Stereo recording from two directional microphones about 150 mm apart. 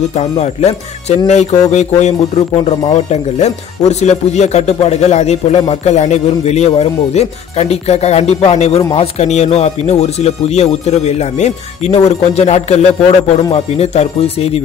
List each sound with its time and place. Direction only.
0.2 s speech: 45° left (ahead or behind)
13.4 s speech: 35° left (ahead or behind)